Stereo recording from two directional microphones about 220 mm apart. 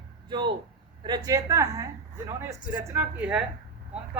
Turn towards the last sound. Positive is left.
turn(degrees=-5)  # may be behind; listen again after turning